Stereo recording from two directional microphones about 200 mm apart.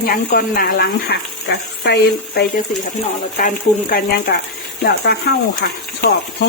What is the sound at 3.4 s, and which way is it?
Speech, 45° left (ahead or behind).